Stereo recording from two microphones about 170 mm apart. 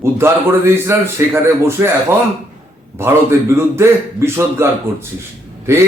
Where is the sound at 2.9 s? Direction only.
15° right (ahead or behind).